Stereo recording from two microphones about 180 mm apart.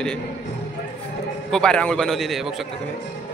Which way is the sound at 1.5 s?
5° left (ahead or behind).